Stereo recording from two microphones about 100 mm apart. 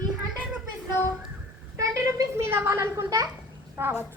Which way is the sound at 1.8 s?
35° right (ahead or behind).